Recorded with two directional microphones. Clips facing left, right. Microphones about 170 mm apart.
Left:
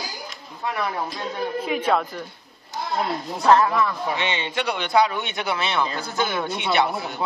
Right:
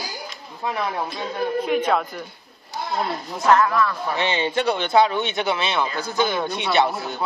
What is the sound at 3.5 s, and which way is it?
Speech, 25° left (ahead or behind).